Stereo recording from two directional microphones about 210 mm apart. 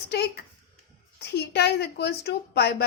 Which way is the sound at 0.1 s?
50° left (ahead or behind).